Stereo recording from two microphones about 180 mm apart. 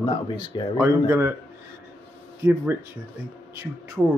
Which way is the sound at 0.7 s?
10° right (ahead or behind).